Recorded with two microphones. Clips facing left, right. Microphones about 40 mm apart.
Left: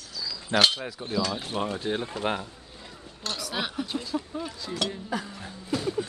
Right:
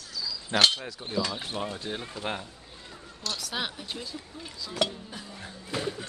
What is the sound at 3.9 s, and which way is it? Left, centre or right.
Speech, left.